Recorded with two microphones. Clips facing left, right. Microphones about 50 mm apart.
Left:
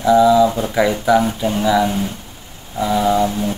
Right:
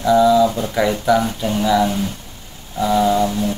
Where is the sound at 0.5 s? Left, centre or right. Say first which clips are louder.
Left 2 dB; centre.